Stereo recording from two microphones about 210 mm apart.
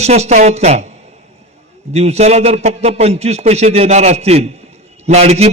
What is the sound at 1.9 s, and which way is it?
A man's voice, 30° right (ahead or behind).